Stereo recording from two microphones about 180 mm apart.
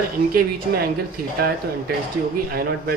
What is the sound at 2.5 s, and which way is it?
Speech, 60° right (ahead or behind).